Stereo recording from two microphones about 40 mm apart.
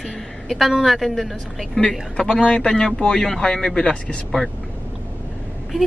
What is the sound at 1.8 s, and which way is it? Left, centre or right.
Speech, centre.